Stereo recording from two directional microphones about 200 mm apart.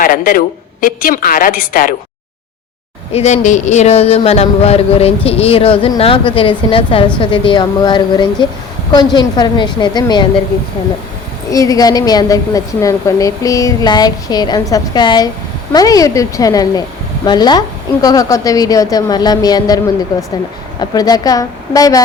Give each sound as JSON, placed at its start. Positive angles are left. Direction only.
{"t": 0.0, "sound": "a woman's voice", "side_deg": 45}
{"t": 3.1, "sound": "speech", "side_deg": 35}
{"t": 11.5, "sound": "a woman's voice", "side_deg": 15}
{"t": 20.9, "sound": "a woman's voice", "side_deg": 20}